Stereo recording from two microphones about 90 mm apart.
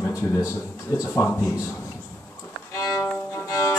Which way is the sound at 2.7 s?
35° left (ahead or behind).